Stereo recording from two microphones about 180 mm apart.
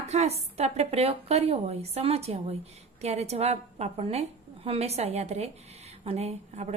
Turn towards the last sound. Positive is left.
turn(degrees=-35)  # may be behind; listen again after turning